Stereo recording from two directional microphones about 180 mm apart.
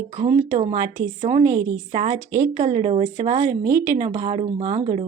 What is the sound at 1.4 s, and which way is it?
Speech, 20° right (ahead or behind).